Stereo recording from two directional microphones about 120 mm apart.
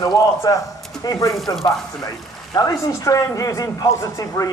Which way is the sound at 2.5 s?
30° left (ahead or behind).